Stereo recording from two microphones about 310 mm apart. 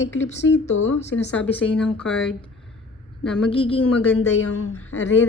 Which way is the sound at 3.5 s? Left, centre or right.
Centre.